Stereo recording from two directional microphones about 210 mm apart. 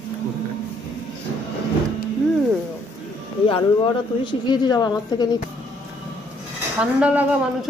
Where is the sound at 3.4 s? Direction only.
25° left (ahead or behind).